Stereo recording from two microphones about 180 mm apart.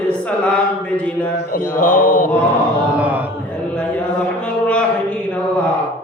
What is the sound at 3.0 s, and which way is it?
Speech, 10° right (ahead or behind).